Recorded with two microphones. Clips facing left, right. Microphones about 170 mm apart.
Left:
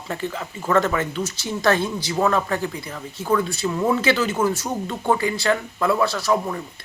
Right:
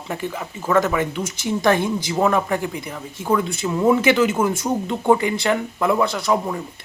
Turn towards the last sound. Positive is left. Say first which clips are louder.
# right 1 dB
turn(degrees=-20)  # may be behind; listen again after turning